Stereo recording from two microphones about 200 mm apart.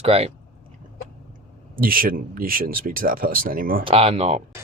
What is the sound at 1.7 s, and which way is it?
Speech, 45° right (ahead or behind).